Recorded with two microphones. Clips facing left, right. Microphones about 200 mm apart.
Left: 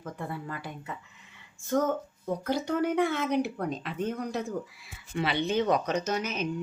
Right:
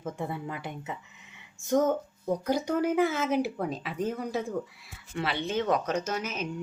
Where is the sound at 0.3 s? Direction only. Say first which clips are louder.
Right 1 dB; 20° right (ahead or behind).